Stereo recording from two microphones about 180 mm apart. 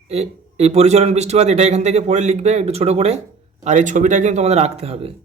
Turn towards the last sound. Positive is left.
turn(degrees=-30)  # may be behind; listen again after turning